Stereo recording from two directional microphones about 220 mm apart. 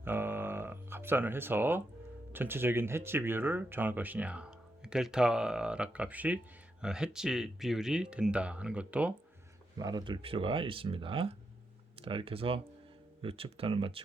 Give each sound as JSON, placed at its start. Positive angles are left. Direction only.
{"t": 0.0, "sound": "music", "side_deg": -10}
{"t": 2.3, "sound": "speech", "side_deg": -10}
{"t": 9.7, "sound": "speech", "side_deg": -15}